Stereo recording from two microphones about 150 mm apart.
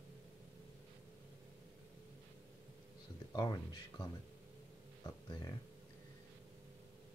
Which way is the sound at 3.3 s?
25° left (ahead or behind).